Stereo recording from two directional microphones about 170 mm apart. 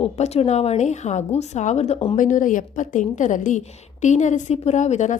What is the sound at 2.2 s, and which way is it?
A woman's voice, 50° left (ahead or behind).